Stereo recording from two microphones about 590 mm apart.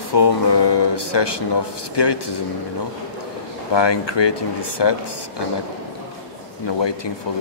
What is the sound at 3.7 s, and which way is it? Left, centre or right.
Speech, left.